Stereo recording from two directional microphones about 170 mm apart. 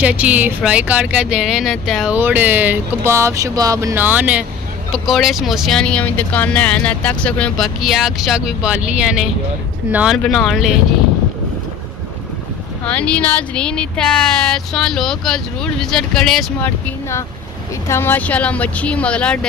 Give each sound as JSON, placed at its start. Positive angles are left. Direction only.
{"t": 0.0, "sound": "speech", "side_deg": -10}
{"t": 2.1, "sound": "speech", "side_deg": -10}
{"t": 10.1, "sound": "speech", "side_deg": 5}
{"t": 12.8, "sound": "speech", "side_deg": 5}
{"t": 17.8, "sound": "speech", "side_deg": 15}